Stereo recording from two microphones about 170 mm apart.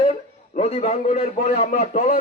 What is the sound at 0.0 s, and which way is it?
A man's voice, 35° left (ahead or behind).